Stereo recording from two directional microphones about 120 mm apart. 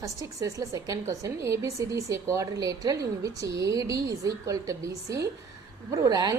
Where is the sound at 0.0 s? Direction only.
25° right (ahead or behind).